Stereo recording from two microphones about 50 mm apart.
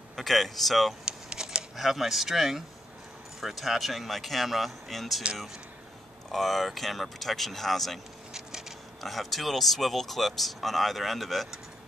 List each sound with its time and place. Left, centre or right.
0.1 s speech: centre
1.0 s a sound: centre
1.8 s speech: centre
6.3 s speech: centre
8.3 s a sound: centre
9.0 s speech: centre